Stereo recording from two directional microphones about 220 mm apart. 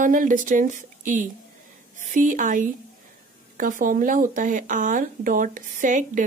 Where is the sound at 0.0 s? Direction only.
35° right (ahead or behind).